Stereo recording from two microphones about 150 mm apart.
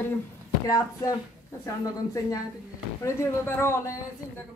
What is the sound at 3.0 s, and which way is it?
Speech, 15° left (ahead or behind).